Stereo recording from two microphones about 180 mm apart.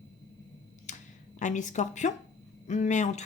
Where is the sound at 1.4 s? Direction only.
45° left (ahead or behind).